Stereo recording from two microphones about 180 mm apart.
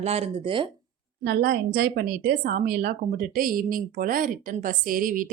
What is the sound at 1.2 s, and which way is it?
Speech, 65° right (ahead or behind).